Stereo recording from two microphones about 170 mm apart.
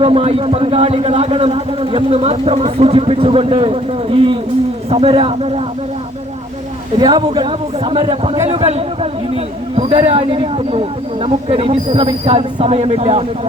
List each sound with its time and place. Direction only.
0.0 s a man's voice: 40° right (ahead or behind)
7.0 s a man's voice: 25° right (ahead or behind)